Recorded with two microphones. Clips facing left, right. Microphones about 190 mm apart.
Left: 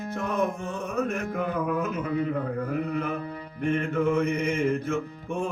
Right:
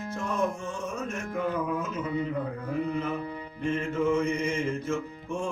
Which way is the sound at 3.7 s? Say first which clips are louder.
Left 2 dB; 60° left (ahead or behind).